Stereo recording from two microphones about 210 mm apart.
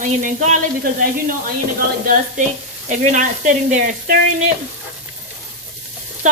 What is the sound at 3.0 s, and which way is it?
Speech, 35° right (ahead or behind).